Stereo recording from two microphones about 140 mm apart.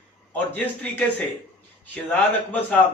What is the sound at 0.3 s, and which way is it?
Speech, 10° left (ahead or behind).